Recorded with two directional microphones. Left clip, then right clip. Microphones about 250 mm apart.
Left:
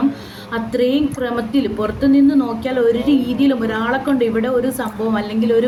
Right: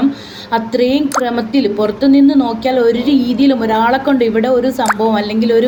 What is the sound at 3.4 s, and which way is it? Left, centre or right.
Speech, centre.